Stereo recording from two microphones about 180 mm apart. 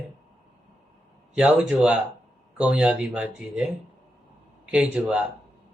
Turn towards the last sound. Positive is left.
turn(degrees=-5)  # may be behind; listen again after turning